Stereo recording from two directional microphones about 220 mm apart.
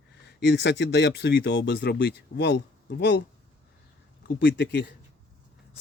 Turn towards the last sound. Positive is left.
turn(degrees=45)  # may be behind; listen again after turning